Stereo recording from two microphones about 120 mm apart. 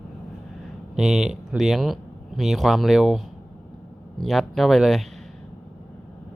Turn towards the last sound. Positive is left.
turn(degrees=0)  # may be behind; listen again after turning